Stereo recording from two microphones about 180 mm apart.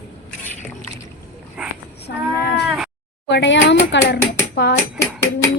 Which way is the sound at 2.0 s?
65° left (ahead or behind).